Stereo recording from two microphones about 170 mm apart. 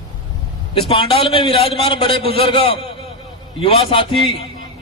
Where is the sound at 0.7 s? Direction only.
30° left (ahead or behind).